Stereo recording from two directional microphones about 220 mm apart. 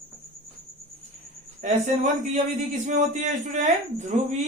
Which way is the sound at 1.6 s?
35° right (ahead or behind).